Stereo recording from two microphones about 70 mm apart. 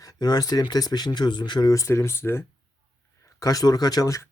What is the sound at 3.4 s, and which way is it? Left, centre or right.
Speech, left.